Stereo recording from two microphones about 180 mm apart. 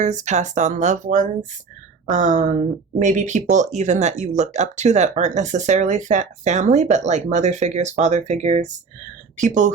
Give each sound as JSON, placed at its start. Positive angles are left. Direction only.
{"t": 0.0, "sound": "speech", "side_deg": -40}